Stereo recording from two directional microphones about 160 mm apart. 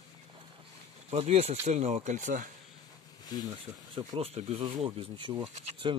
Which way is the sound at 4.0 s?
35° right (ahead or behind).